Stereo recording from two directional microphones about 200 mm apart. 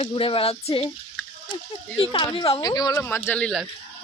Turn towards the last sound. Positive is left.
turn(degrees=5)  # may be behind; listen again after turning